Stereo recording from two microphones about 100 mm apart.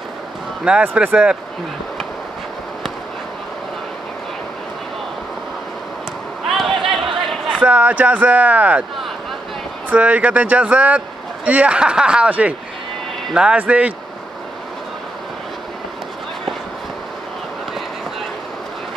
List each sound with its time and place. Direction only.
0.9 s speech: 10° right (ahead or behind)
6.5 s a sound: centre (ahead or behind)
7.5 s speech: 15° right (ahead or behind)
9.8 s speech: 15° right (ahead or behind)